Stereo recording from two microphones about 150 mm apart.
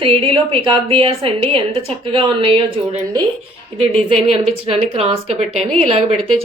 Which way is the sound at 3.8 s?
40° right (ahead or behind).